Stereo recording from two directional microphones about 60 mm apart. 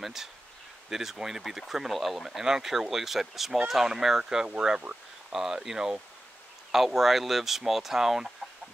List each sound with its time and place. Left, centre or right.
0.0 s speech: centre